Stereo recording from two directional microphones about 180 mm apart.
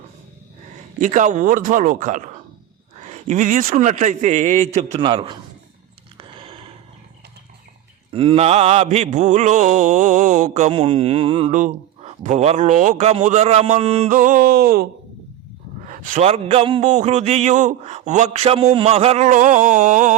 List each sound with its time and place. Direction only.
0.9 s a man's voice: 40° right (ahead or behind)
4.9 s a man's voice: 25° right (ahead or behind)
6.1 s a sound: 30° right (ahead or behind)
8.1 s mantra: 30° right (ahead or behind)
11.5 s mantra: 40° right (ahead or behind)
14.1 s a sound: 50° right (ahead or behind)
15.9 s mantra: 45° right (ahead or behind)